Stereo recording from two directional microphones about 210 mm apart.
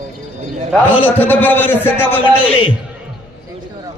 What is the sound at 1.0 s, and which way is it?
Speech, 10° left (ahead or behind).